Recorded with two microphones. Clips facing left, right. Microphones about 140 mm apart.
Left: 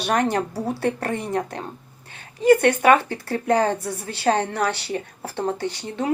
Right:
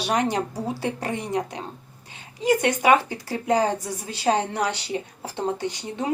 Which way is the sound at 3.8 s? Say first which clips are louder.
Left 2 dB; 60° left (ahead or behind).